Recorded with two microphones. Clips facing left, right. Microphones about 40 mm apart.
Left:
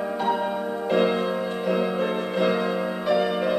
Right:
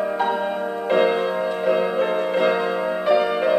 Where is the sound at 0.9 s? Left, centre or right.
Centre.